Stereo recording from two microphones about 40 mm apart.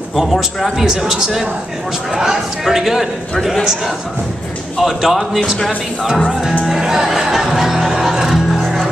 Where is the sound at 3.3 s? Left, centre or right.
Centre.